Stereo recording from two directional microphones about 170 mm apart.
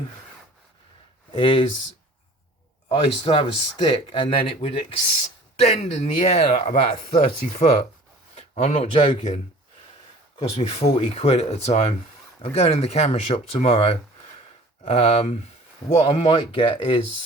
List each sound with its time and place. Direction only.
1.3 s speech: 30° left (ahead or behind)
2.9 s speech: 30° left (ahead or behind)